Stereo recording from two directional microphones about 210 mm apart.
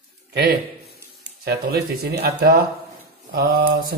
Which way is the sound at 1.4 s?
45° right (ahead or behind).